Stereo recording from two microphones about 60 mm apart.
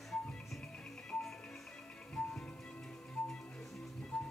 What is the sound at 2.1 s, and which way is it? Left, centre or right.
Music, centre.